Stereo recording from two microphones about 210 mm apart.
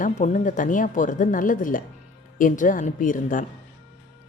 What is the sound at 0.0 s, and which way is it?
Speech, 35° left (ahead or behind).